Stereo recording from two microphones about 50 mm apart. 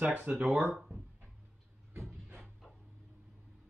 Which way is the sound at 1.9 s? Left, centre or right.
Right.